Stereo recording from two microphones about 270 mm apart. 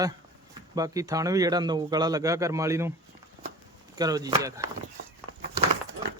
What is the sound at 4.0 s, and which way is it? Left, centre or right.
Speech, centre.